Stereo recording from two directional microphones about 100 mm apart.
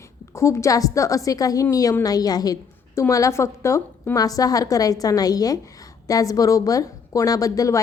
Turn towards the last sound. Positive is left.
turn(degrees=35)  # may be behind; listen again after turning